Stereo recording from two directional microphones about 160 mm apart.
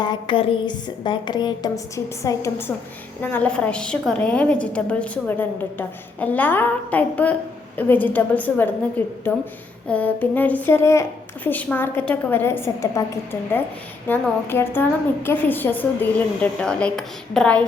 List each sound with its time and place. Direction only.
0.0 s a sound: 30° left (ahead or behind)
2.2 s a woman's voice: 15° left (ahead or behind)
14.1 s a woman's voice: 15° left (ahead or behind)